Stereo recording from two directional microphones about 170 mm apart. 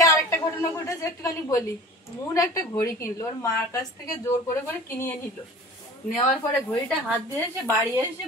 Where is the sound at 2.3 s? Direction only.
20° left (ahead or behind).